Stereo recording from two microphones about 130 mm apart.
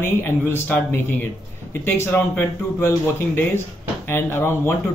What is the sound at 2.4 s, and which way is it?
Speech, 15° left (ahead or behind).